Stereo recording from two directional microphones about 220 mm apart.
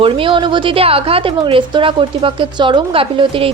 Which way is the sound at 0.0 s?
25° right (ahead or behind).